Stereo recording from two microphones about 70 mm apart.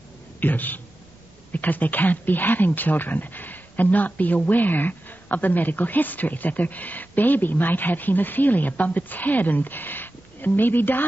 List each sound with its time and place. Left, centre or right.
0.4 s speech: left